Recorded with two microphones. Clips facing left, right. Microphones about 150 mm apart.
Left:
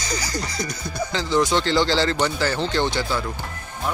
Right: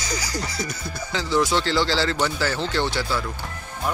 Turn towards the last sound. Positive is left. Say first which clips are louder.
# left 2 dB
turn(degrees=-5)  # may be behind; listen again after turning